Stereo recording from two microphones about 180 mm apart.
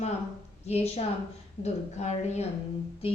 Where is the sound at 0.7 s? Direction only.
35° left (ahead or behind).